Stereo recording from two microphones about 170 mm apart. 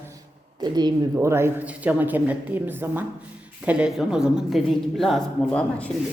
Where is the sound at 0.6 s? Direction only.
25° right (ahead or behind).